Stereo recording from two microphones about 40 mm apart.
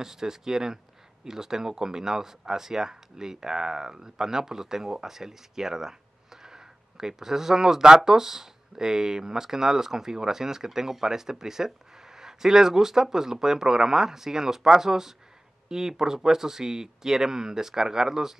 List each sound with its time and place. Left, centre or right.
0.0 s speech: centre